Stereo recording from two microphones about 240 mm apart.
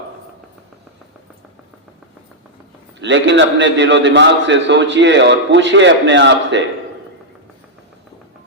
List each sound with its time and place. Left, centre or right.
3.0 s a man's voice: right